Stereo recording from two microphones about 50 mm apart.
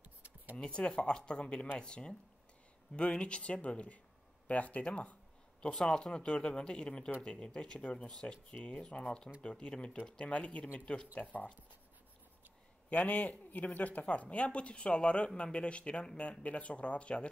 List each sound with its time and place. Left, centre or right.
0.6 s speech: centre
5.6 s speech: centre
12.9 s speech: left